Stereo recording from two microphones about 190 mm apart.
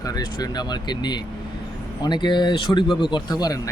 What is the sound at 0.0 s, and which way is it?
Speech, 20° left (ahead or behind).